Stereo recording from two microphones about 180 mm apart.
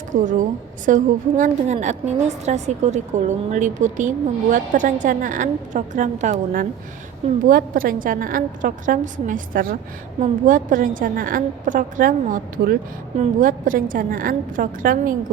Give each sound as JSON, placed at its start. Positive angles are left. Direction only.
{"t": 0.1, "sound": "a woman's voice", "side_deg": -45}
{"t": 7.4, "sound": "a woman's voice", "side_deg": -50}